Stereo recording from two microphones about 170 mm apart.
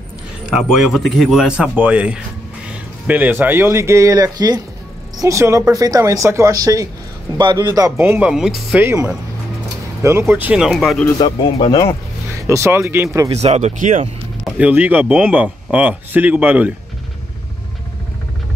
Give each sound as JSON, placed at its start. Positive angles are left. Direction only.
{"t": 0.7, "sound": "speech", "side_deg": 0}
{"t": 8.8, "sound": "speech", "side_deg": -15}
{"t": 11.5, "sound": "speech", "side_deg": 25}
{"t": 12.4, "sound": "speech", "side_deg": -15}
{"t": 13.3, "sound": "speech", "side_deg": -40}
{"t": 14.4, "sound": "speech", "side_deg": -10}